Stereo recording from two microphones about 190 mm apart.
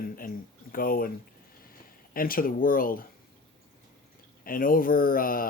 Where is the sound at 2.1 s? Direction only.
50° left (ahead or behind).